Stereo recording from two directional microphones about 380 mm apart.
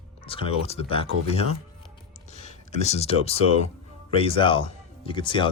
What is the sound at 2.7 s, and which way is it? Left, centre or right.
Speech, centre.